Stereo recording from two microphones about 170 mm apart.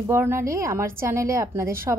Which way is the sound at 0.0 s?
15° right (ahead or behind).